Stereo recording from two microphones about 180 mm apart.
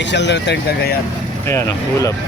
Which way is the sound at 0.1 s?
75° left (ahead or behind).